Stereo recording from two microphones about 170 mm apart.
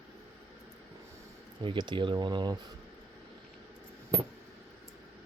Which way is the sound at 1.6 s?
30° right (ahead or behind).